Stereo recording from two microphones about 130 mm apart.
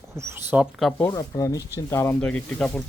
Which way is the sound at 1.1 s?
25° left (ahead or behind).